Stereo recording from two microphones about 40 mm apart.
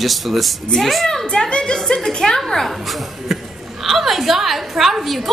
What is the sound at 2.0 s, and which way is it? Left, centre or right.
A woman's voice, centre.